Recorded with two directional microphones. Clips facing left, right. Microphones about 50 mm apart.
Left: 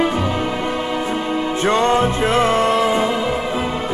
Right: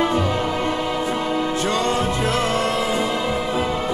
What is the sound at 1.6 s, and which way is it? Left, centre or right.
Music, left.